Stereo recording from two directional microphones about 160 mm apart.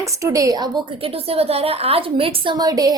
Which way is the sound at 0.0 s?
20° right (ahead or behind).